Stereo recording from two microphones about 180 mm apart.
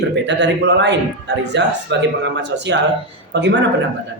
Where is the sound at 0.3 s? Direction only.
75° right (ahead or behind).